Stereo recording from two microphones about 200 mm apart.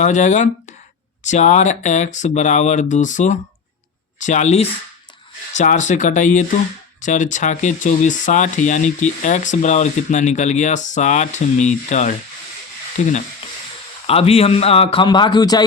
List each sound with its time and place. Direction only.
0.0 s a man's voice: 35° left (ahead or behind); by 15.6 s 20° left (ahead or behind)